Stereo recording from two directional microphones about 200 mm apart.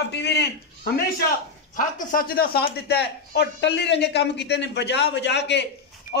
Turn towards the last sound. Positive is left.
turn(degrees=60)  # may be behind; listen again after turning